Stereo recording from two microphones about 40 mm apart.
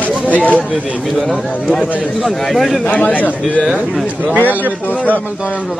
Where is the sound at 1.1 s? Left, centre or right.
Centre.